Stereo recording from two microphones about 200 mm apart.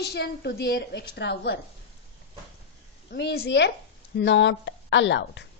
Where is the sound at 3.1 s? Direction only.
55° left (ahead or behind).